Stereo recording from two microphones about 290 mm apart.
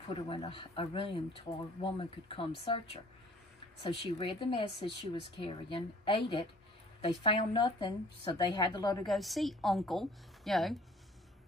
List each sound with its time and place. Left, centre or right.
0.1 s a woman's voice: centre
9.0 s a woman's voice: centre